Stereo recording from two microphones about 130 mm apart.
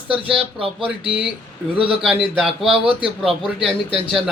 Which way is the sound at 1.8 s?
5° right (ahead or behind).